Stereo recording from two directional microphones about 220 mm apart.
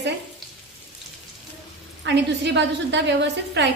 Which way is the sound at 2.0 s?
50° right (ahead or behind).